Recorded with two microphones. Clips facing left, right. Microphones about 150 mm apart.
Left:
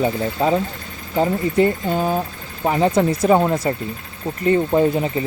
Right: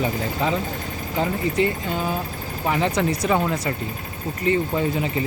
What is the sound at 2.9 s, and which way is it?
Speech, 50° left (ahead or behind).